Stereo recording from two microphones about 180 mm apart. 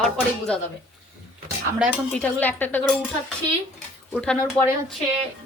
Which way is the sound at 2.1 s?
10° left (ahead or behind).